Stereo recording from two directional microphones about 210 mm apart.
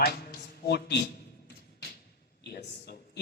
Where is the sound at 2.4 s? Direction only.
50° left (ahead or behind).